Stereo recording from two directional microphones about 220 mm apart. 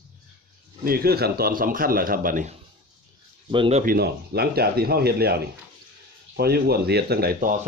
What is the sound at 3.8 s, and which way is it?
Speech, 45° right (ahead or behind).